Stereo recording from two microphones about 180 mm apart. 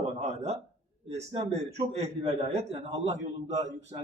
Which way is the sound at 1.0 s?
35° right (ahead or behind).